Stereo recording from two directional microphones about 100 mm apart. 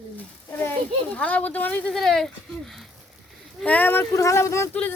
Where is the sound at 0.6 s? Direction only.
15° left (ahead or behind); by 2.9 s centre (ahead or behind).